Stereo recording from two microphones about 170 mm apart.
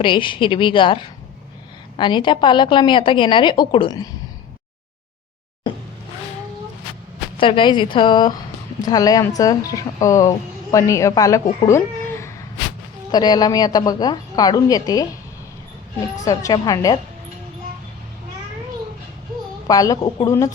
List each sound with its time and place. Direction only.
0.0 s a woman's voice: 30° left (ahead or behind)
7.3 s a woman's voice: 30° left (ahead or behind)
11.6 s a sound: 15° left (ahead or behind)
13.1 s a woman's voice: 25° left (ahead or behind)
16.2 s a woman's voice: 20° left (ahead or behind)
19.6 s a woman's voice: 20° left (ahead or behind)